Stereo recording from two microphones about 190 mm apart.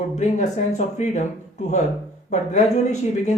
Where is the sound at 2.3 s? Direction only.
40° left (ahead or behind).